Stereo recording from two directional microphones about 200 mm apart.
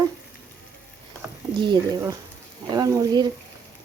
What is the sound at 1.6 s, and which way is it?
Speech, 20° right (ahead or behind).